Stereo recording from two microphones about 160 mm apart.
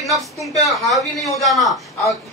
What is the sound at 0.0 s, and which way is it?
A woman's voice, centre (ahead or behind).